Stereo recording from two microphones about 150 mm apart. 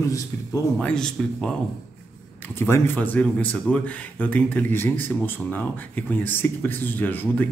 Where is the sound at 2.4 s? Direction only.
15° left (ahead or behind).